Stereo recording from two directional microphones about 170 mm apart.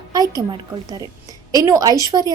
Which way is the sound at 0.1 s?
20° right (ahead or behind).